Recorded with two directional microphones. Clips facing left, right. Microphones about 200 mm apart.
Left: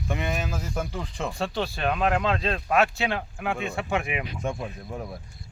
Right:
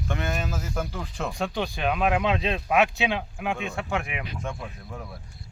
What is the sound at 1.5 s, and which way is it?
Speech, 15° right (ahead or behind).